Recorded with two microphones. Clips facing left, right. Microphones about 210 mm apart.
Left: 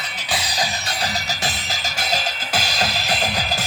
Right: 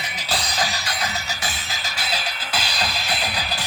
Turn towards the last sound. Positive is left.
turn(degrees=45)  # may be behind; listen again after turning